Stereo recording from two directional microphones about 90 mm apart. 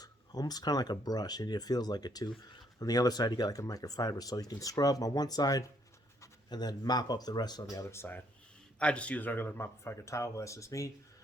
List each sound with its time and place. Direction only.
0.0 s speech: 45° left (ahead or behind)
7.9 s speech: 25° left (ahead or behind)
8.8 s speech: 15° left (ahead or behind); by 10.9 s 35° left (ahead or behind)